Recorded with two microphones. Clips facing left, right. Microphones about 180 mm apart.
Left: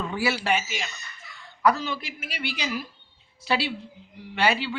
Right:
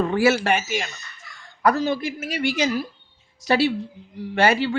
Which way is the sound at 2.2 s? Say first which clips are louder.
Right 10 dB; 45° right (ahead or behind).